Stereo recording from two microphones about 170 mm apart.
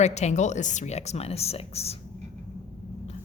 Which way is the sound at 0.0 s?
40° left (ahead or behind).